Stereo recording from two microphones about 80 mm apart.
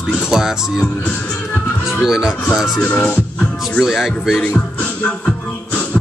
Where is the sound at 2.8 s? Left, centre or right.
Centre.